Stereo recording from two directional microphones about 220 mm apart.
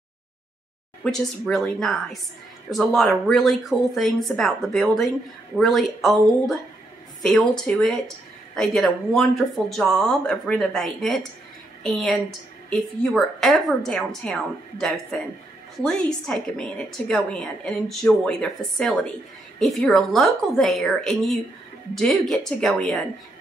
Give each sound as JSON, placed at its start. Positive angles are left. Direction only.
{"t": 1.0, "sound": "a woman's voice", "side_deg": 0}